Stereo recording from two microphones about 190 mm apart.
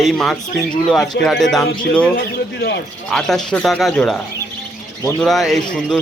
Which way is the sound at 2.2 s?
65° left (ahead or behind).